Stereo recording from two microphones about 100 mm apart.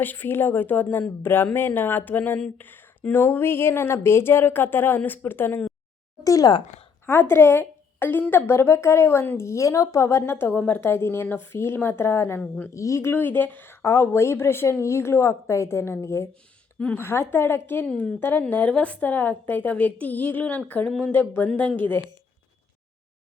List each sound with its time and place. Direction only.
0.0 s a woman's voice: 20° left (ahead or behind)
6.2 s speech: 35° left (ahead or behind)
7.0 s a woman's voice: 20° left (ahead or behind)
12.7 s a woman's voice: 30° left (ahead or behind)
17.8 s a woman's voice: 10° left (ahead or behind)